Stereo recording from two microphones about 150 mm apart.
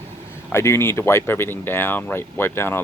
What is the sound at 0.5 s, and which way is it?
Speech, 15° left (ahead or behind).